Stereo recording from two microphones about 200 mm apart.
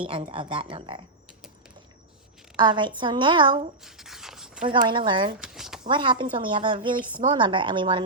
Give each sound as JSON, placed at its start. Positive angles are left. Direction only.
{"t": 0.0, "sound": "a woman's voice", "side_deg": -25}
{"t": 2.6, "sound": "a woman's voice", "side_deg": -20}
{"t": 3.8, "sound": "a sound", "side_deg": 0}
{"t": 4.6, "sound": "a woman's voice", "side_deg": -25}
{"t": 5.4, "sound": "a sound", "side_deg": 0}
{"t": 5.9, "sound": "a woman's voice", "side_deg": -25}